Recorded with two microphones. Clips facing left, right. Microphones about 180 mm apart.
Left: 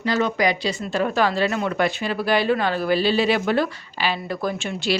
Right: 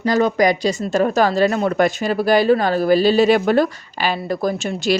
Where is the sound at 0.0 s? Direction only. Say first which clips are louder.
Right 5 dB; 45° right (ahead or behind).